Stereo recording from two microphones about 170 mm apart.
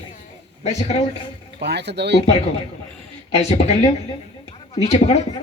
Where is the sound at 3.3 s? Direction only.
40° left (ahead or behind).